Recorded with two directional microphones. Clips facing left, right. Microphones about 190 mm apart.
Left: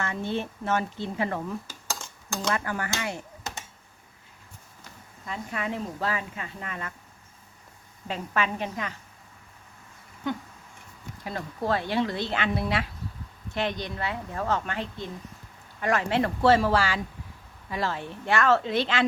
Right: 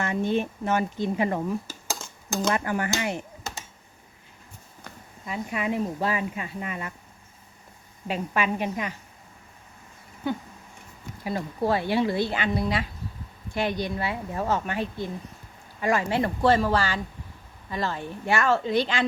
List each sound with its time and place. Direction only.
0.0 s speech: 15° right (ahead or behind)
5.2 s speech: 15° right (ahead or behind)
8.0 s speech: 15° right (ahead or behind)
11.2 s speech: 10° right (ahead or behind)